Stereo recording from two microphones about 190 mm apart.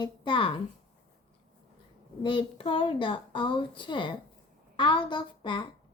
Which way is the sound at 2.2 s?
25° left (ahead or behind).